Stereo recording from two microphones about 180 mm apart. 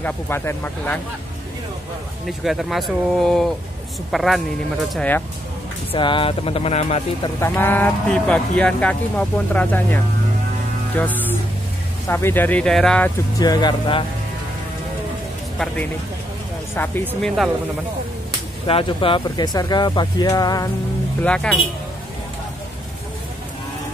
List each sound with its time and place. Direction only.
0.0 s speech: 10° left (ahead or behind)
2.2 s speech: centre (ahead or behind)
5.9 s speech: 30° left (ahead or behind)
7.2 s speech: 15° left (ahead or behind)
11.0 s music: 10° left (ahead or behind)
12.1 s speech: 15° left (ahead or behind)
13.4 s speech: 25° left (ahead or behind)
15.6 s speech: 5° left (ahead or behind)
18.7 s speech: 30° left (ahead or behind)
21.2 s speech: 5° left (ahead or behind)